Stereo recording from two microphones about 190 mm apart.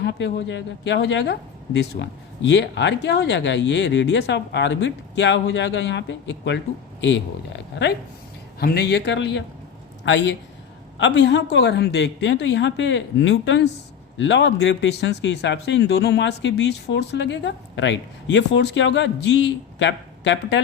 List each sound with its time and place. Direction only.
0.0 s speech: 65° left (ahead or behind)